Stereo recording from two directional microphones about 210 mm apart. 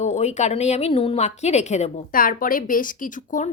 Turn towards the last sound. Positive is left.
turn(degrees=40)  # may be behind; listen again after turning